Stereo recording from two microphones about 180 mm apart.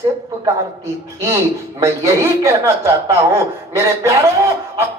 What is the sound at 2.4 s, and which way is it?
A man's voice, 15° right (ahead or behind).